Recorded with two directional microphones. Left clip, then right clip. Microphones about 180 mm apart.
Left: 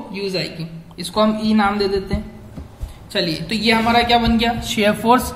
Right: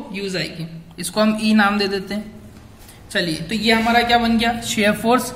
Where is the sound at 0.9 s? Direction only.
40° right (ahead or behind).